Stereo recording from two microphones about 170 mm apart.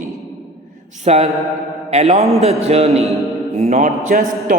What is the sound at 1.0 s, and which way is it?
A man's voice, 40° right (ahead or behind).